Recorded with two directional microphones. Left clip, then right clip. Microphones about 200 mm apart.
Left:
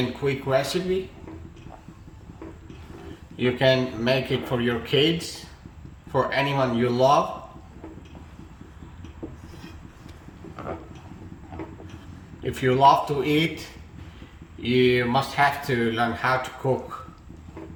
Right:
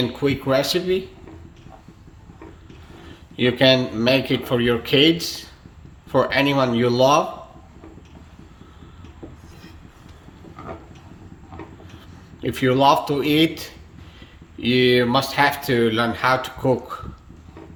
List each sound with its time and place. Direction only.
0.2 s speech: 50° right (ahead or behind)
3.3 s speech: 50° right (ahead or behind)
12.4 s speech: 50° right (ahead or behind)
14.6 s speech: 55° right (ahead or behind)